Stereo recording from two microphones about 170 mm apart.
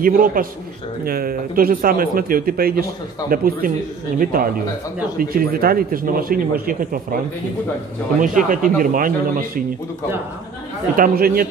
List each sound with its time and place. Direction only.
0.0 s speech: 55° right (ahead or behind)
8.2 s speech: 50° right (ahead or behind)
11.0 s speech: 60° right (ahead or behind)